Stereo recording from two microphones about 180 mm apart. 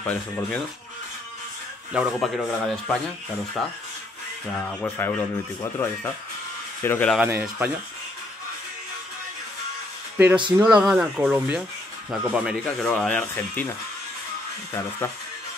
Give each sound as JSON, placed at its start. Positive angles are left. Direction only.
{"t": 0.0, "sound": "speech", "side_deg": 10}
{"t": 1.9, "sound": "speech", "side_deg": 0}
{"t": 4.7, "sound": "speech", "side_deg": 10}
{"t": 7.2, "sound": "speech", "side_deg": -5}
{"t": 10.1, "sound": "speech", "side_deg": -10}